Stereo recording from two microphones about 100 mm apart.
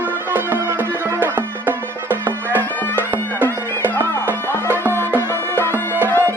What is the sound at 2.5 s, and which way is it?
Music, 20° left (ahead or behind).